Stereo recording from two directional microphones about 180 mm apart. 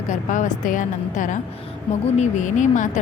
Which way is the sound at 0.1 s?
45° left (ahead or behind).